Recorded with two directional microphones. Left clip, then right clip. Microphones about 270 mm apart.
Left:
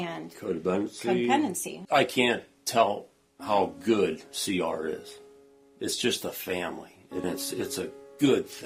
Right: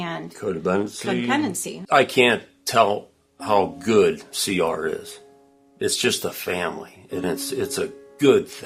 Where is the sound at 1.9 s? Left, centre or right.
Right.